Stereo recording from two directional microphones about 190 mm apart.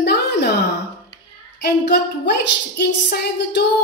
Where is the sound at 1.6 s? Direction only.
60° left (ahead or behind).